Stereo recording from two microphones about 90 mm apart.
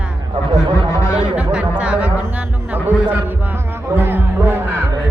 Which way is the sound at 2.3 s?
20° right (ahead or behind).